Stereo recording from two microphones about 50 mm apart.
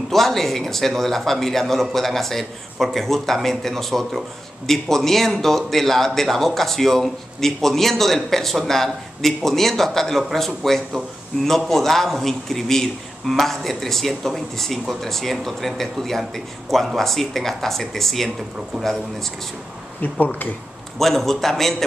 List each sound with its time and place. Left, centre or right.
0.1 s speech: centre
20.0 s speech: left
21.0 s speech: centre